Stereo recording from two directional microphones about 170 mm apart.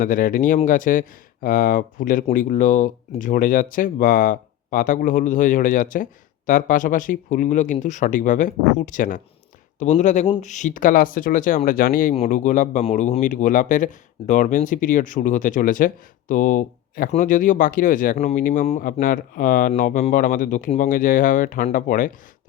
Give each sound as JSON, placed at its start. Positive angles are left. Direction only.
{"t": 0.0, "sound": "speech", "side_deg": 55}
{"t": 12.1, "sound": "speech", "side_deg": 40}